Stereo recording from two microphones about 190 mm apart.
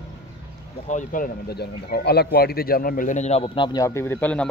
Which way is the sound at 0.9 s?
45° left (ahead or behind).